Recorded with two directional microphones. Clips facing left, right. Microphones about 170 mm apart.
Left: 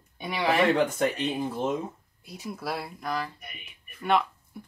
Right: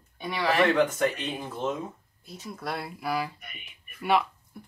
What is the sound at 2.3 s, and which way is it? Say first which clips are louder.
Speech: left 1 dB; 10° left (ahead or behind).